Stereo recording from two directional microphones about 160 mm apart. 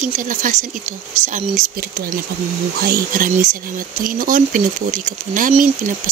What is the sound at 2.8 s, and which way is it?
Speech, 65° right (ahead or behind).